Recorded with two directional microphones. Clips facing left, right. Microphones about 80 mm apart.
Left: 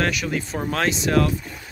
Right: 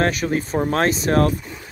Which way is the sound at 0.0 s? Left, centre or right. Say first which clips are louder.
Right 4 dB; right.